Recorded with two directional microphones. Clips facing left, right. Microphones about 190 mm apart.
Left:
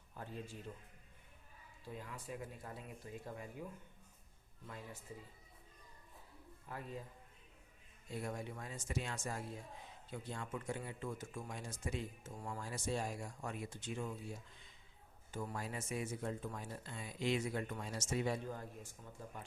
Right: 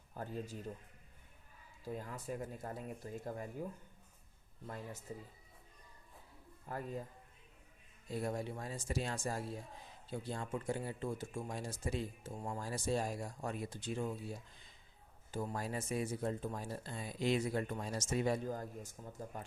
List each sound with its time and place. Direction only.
0.1 s music: 40° right (ahead or behind)
1.9 s speech: 40° right (ahead or behind)
4.6 s speech: 40° right (ahead or behind)
6.7 s speech: 45° right (ahead or behind)
8.1 s speech: 35° right (ahead or behind)